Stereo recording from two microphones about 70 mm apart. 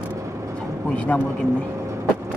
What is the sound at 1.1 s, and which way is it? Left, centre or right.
Speech, left.